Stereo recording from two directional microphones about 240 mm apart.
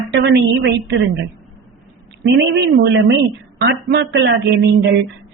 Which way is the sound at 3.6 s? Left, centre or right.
Right.